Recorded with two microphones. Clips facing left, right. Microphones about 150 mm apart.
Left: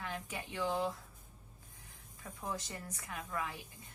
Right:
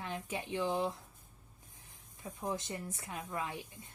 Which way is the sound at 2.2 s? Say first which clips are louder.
Right 4 dB; 20° right (ahead or behind).